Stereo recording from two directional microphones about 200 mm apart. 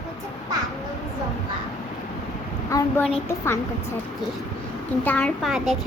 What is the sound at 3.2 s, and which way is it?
Speech, 15° left (ahead or behind).